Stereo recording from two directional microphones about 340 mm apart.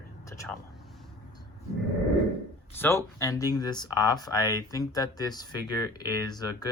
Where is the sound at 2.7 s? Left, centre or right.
Centre.